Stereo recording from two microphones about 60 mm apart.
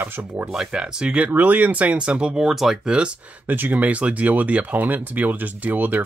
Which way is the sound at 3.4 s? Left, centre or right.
Right.